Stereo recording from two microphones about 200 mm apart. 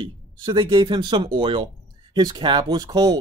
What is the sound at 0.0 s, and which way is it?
Speech, 25° right (ahead or behind).